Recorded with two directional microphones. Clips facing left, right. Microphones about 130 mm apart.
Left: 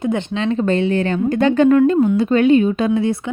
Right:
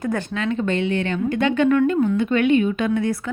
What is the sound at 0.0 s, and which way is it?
Speech, 25° left (ahead or behind).